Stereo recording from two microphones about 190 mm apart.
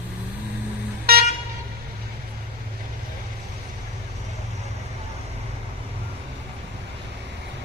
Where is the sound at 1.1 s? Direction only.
55° right (ahead or behind).